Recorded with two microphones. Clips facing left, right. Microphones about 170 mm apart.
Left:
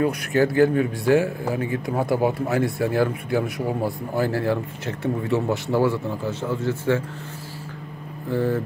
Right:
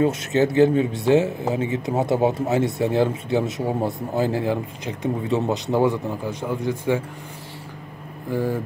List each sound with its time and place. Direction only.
0.0 s speech: 20° right (ahead or behind)
8.3 s speech: 10° right (ahead or behind)